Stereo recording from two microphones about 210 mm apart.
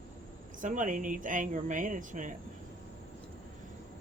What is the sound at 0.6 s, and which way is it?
Speech, 40° right (ahead or behind).